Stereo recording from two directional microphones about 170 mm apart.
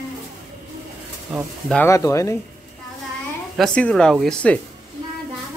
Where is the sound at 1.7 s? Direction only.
15° left (ahead or behind).